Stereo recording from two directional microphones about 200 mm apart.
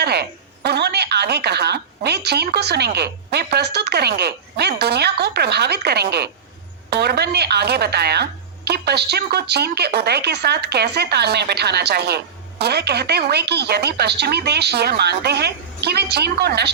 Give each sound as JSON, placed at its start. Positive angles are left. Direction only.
{"t": 0.0, "sound": "speech", "side_deg": -55}